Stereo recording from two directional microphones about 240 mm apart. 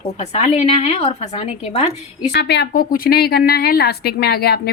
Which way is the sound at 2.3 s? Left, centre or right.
Left.